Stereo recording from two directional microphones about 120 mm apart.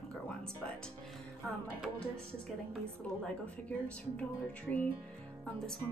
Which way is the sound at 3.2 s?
10° left (ahead or behind).